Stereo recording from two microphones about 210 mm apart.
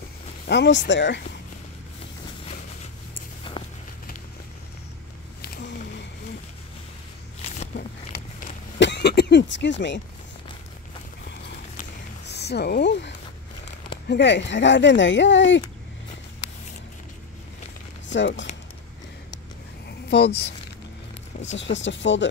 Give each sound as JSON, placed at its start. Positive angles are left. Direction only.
{"t": 0.5, "sound": "speech", "side_deg": 55}
{"t": 3.5, "sound": "walk", "side_deg": 25}
{"t": 5.4, "sound": "a sound", "side_deg": 55}
{"t": 8.7, "sound": "a sound", "side_deg": 55}
{"t": 12.3, "sound": "speech", "side_deg": 50}
{"t": 18.0, "sound": "speech", "side_deg": 60}
{"t": 20.1, "sound": "speech", "side_deg": 50}